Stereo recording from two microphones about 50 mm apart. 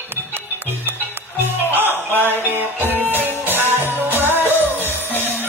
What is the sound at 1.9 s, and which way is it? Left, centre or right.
Music, left.